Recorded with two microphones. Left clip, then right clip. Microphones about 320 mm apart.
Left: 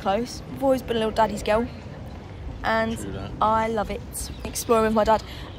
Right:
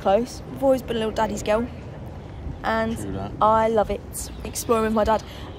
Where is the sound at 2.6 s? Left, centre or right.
Centre.